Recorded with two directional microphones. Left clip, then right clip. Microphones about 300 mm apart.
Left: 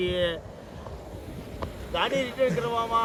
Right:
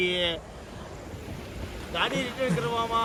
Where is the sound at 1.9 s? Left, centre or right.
Left.